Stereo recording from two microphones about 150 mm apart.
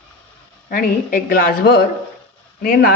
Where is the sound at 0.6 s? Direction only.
70° left (ahead or behind).